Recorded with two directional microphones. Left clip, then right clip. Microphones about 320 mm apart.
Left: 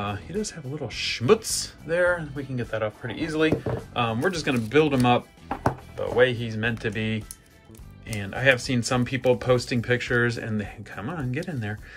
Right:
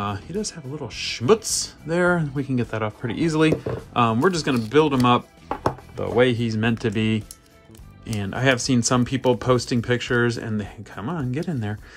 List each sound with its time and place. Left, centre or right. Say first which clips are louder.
0.0 s speech: right 2 dB; centre